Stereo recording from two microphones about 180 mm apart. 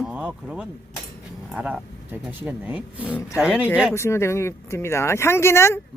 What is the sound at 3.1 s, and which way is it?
Speech, 15° left (ahead or behind).